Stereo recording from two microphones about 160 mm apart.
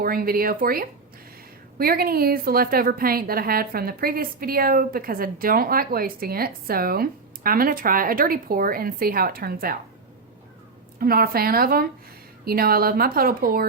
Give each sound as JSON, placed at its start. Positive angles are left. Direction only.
{"t": 0.0, "sound": "a woman's voice", "side_deg": -65}
{"t": 11.0, "sound": "a woman's voice", "side_deg": -65}